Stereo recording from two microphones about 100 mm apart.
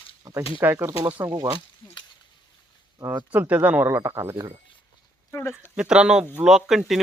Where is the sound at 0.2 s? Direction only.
40° right (ahead or behind).